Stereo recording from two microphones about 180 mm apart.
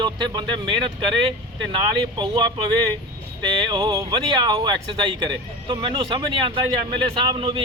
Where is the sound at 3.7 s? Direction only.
30° right (ahead or behind).